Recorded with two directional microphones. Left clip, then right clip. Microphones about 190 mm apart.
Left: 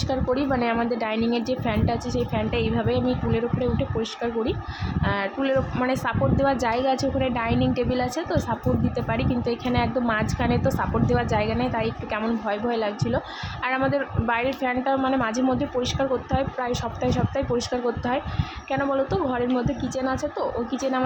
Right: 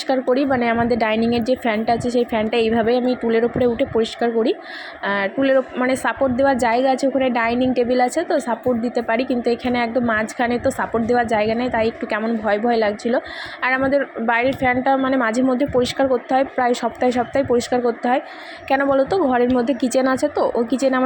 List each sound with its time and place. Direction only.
0.1 s a woman's voice: 20° right (ahead or behind)